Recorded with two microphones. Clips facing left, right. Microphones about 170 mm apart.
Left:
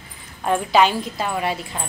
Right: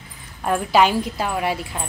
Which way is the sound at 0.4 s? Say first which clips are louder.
Even; 5° right (ahead or behind).